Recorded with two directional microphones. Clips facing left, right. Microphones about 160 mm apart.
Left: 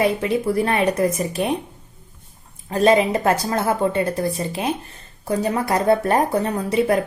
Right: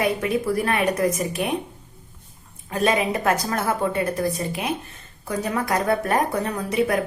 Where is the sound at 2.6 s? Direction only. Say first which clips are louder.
Left 5 dB; 30° left (ahead or behind).